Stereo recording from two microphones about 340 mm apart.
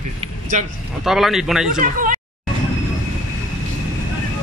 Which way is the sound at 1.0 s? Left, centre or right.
Centre.